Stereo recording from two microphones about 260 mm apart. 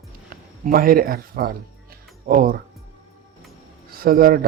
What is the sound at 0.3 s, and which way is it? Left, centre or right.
Speech, right.